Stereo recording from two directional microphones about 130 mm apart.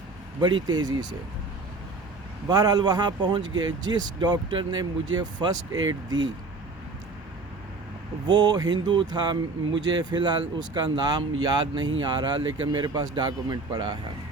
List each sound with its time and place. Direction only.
0.4 s speech: 35° right (ahead or behind)
2.5 s speech: 30° right (ahead or behind)
8.3 s speech: 35° right (ahead or behind)